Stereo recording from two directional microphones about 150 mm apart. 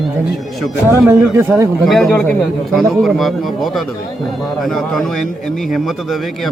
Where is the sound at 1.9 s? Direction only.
Centre (ahead or behind).